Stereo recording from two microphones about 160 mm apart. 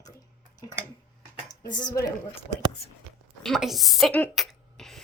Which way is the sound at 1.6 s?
25° left (ahead or behind).